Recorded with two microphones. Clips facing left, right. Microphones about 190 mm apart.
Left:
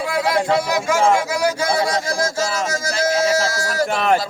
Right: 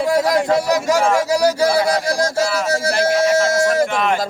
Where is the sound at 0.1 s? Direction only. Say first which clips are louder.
Right 2 dB; 40° right (ahead or behind).